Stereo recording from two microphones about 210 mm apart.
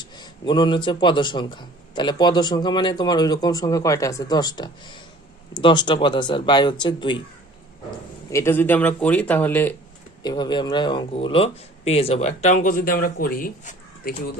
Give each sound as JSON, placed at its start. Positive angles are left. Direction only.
{"t": 0.0, "sound": "speech", "side_deg": 20}
{"t": 8.3, "sound": "a man's voice", "side_deg": 10}
{"t": 10.2, "sound": "speech", "side_deg": 20}